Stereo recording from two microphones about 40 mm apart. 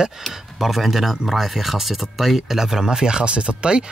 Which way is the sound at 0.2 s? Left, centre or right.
Centre.